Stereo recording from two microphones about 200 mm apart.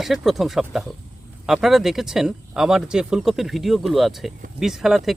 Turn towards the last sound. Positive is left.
turn(degrees=0)  # may be behind; listen again after turning